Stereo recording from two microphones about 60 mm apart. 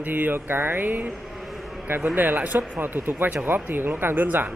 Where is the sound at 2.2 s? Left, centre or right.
Right.